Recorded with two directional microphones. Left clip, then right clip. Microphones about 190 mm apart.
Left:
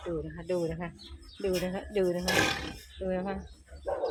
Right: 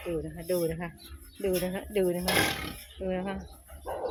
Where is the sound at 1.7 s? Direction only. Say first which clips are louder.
Right 1 dB; 10° right (ahead or behind).